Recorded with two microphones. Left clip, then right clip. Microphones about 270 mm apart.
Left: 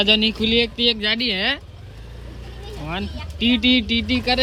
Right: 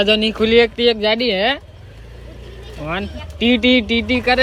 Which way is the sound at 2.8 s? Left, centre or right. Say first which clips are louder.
Right 5 dB; centre.